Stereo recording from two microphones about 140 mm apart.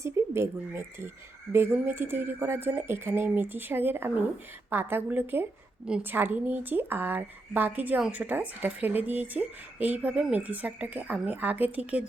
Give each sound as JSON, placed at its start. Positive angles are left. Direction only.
{"t": 0.0, "sound": "speech", "side_deg": -20}